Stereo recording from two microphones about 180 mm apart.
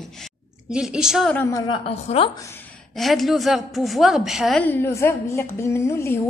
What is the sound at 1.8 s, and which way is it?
Speech, 35° left (ahead or behind).